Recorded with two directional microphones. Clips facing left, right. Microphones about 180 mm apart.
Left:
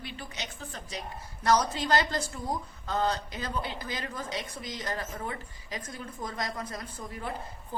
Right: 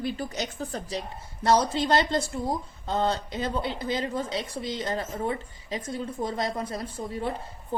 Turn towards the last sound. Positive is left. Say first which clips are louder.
# right 7 dB
turn(degrees=-30)  # may be behind; listen again after turning